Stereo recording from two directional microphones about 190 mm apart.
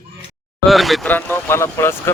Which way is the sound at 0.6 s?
Centre (ahead or behind).